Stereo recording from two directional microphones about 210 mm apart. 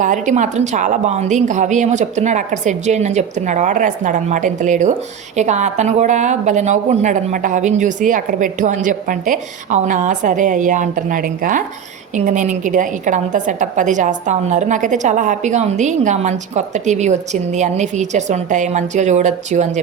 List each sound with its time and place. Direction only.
0.0 s a woman's voice: 35° right (ahead or behind)